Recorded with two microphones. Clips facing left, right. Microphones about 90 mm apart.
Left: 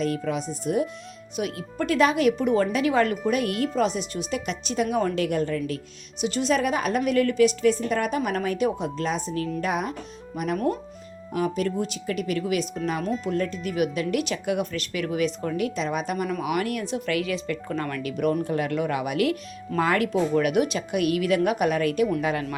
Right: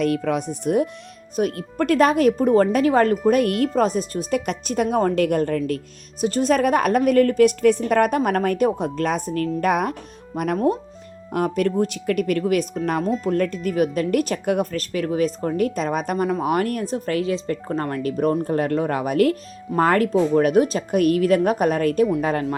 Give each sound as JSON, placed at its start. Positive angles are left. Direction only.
{"t": 0.0, "sound": "a woman's voice", "side_deg": -60}